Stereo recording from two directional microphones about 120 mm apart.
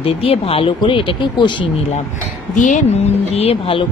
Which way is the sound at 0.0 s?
50° left (ahead or behind).